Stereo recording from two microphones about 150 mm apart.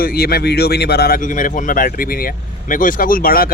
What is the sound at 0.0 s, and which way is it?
Speech, 85° left.